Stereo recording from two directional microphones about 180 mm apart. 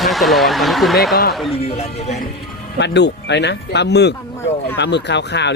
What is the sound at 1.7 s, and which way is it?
Speech, 35° left (ahead or behind).